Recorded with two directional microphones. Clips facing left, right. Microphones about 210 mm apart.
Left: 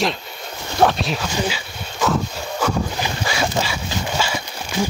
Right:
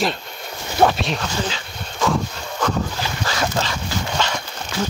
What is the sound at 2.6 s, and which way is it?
Dog, 10° left (ahead or behind).